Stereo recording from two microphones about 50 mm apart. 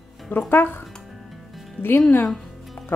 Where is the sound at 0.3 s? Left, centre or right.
Left.